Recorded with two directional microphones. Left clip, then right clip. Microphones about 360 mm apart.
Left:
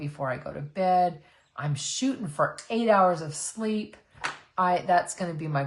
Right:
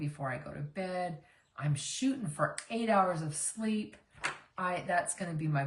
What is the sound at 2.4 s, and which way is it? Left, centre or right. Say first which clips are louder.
Speech: left 9 dB; centre.